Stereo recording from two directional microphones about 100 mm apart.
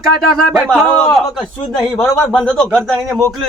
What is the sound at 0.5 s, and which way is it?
Speech, centre (ahead or behind).